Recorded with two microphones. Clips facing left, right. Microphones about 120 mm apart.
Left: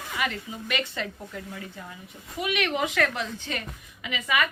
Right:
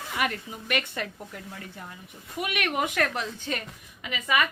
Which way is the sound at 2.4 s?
50° right (ahead or behind).